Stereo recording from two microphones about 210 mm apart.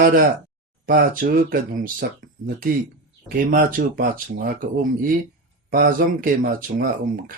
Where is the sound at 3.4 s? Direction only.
40° right (ahead or behind).